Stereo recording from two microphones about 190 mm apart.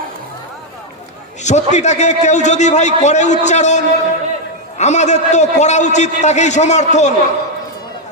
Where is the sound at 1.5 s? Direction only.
35° left (ahead or behind).